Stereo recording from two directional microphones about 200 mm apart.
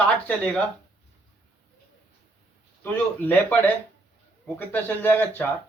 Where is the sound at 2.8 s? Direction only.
10° left (ahead or behind).